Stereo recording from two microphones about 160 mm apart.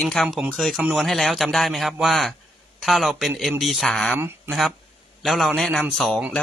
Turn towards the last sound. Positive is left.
turn(degrees=0)  # may be behind; listen again after turning